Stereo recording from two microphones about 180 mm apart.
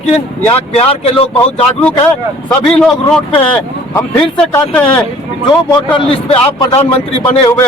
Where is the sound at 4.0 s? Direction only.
10° left (ahead or behind).